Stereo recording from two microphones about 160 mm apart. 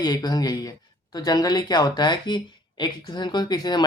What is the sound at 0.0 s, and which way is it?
Speech, 25° left (ahead or behind).